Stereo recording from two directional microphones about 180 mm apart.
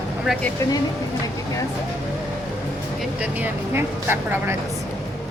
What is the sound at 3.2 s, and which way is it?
Speech, 10° right (ahead or behind).